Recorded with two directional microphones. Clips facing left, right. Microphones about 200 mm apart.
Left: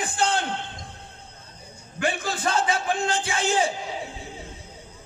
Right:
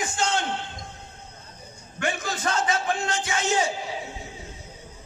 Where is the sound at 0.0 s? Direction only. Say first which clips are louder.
Left 1 dB; 35° left (ahead or behind).